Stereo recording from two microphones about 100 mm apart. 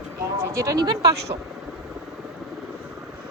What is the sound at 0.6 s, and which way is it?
Speech, 40° right (ahead or behind).